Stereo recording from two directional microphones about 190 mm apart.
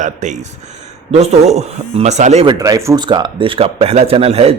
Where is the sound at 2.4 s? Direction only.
20° right (ahead or behind).